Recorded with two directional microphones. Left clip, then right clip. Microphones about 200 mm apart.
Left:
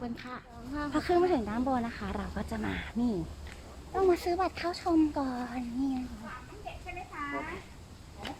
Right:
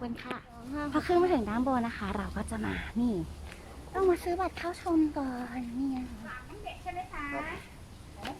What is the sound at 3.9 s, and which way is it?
Speech, 20° left (ahead or behind).